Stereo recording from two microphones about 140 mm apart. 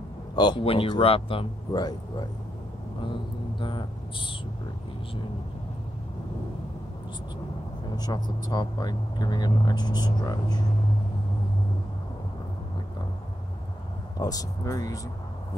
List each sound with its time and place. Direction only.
0.4 s speech: 35° left (ahead or behind)
7.9 s speech: 30° left (ahead or behind)
14.1 s speech: 25° left (ahead or behind)